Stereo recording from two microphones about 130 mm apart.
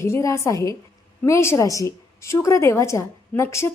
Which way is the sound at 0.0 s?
25° left (ahead or behind).